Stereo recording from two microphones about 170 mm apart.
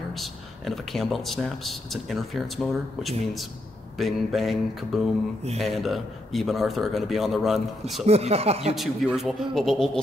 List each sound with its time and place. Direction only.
0.1 s speech: centre (ahead or behind)
8.0 s speech: 35° right (ahead or behind)
8.7 s speech: centre (ahead or behind)